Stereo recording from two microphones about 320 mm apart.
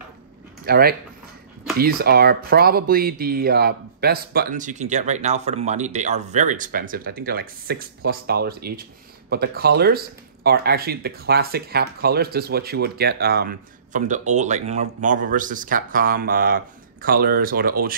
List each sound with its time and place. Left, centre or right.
0.7 s speech: right